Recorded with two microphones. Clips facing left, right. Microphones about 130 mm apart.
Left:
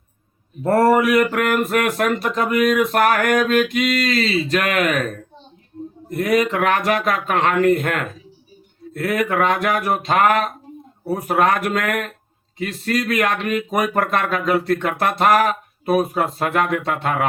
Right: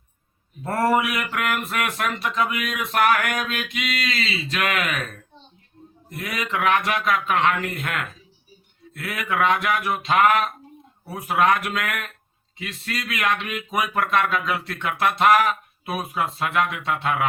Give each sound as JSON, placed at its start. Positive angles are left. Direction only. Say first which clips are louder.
{"t": 0.6, "sound": "speech", "louder": "left 6 dB", "side_deg": 40}